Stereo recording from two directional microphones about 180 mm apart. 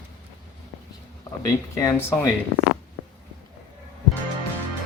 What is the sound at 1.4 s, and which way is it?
Speech, 20° left (ahead or behind).